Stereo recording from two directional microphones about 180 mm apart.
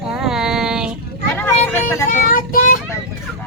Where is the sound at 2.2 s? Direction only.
50° left (ahead or behind).